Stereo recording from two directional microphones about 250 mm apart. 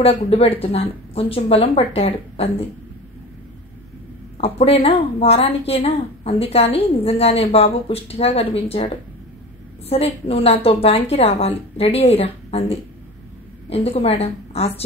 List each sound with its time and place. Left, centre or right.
0.0 s speech: left
4.4 s speech: left